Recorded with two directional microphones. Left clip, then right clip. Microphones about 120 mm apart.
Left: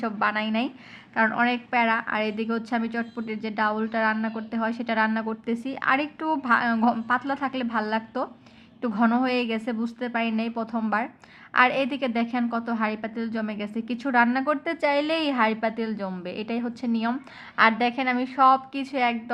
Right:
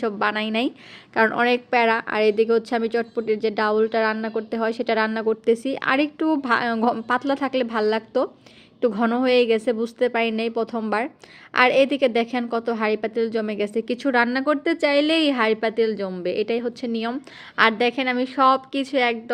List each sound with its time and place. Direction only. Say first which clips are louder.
0.0 s a woman's voice: right 2 dB; 25° right (ahead or behind)